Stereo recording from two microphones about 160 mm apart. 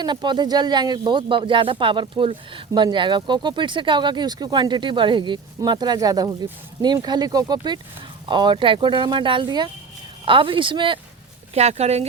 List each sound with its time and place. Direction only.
0.0 s speech: 30° right (ahead or behind)
11.5 s speech: 40° right (ahead or behind)